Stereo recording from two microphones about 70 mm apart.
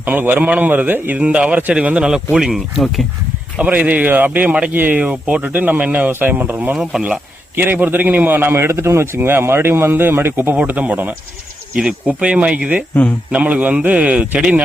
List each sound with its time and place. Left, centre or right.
0.0 s speech: right; by 3.0 s centre
3.6 s speech: right
6.9 s speech: centre
7.5 s a man's voice: right
10.5 s speech: right
12.9 s speech: left
13.3 s speech: right